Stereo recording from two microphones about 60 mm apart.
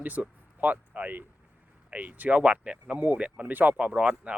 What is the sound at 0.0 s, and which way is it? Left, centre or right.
Speech, right.